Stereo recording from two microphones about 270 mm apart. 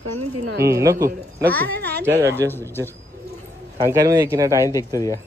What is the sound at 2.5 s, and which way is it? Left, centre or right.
Speech, centre.